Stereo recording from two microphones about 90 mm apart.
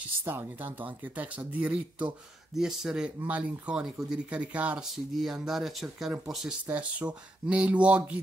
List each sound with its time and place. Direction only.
0.2 s speech: 20° right (ahead or behind)
4.9 s speech: 5° right (ahead or behind)